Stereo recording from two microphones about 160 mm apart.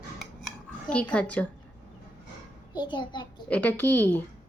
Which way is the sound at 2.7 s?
30° left (ahead or behind).